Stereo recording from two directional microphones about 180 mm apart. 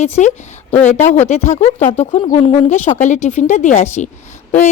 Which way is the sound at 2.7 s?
40° left (ahead or behind).